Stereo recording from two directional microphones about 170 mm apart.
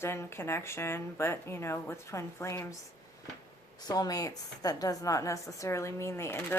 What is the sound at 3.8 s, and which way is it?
A woman's voice, 25° left (ahead or behind).